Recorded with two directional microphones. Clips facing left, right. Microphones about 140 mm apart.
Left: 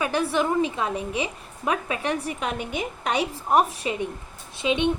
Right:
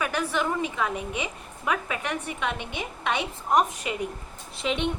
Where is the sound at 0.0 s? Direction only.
30° left (ahead or behind).